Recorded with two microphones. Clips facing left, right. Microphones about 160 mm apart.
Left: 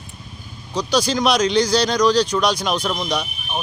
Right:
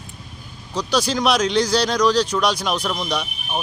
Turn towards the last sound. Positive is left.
turn(degrees=0)  # may be behind; listen again after turning